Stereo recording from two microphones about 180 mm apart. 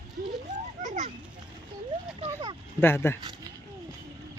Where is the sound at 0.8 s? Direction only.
40° right (ahead or behind).